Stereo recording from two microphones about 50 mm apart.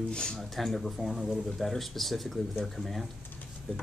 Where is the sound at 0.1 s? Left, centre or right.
Centre.